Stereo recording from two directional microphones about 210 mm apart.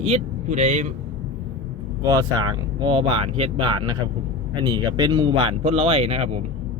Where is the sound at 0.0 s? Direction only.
30° right (ahead or behind).